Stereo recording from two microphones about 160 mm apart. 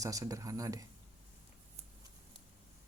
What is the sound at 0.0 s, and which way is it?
Speech, 20° right (ahead or behind).